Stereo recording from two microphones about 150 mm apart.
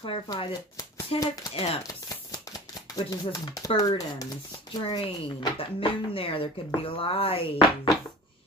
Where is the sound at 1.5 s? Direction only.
40° left (ahead or behind).